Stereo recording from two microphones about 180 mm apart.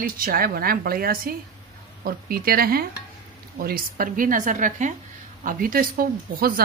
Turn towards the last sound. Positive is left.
turn(degrees=-55)  # may be behind; listen again after turning